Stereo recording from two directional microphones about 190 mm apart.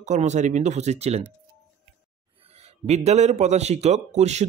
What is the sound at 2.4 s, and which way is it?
Speech, 35° right (ahead or behind).